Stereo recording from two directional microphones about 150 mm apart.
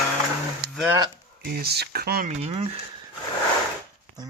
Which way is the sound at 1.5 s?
90° right.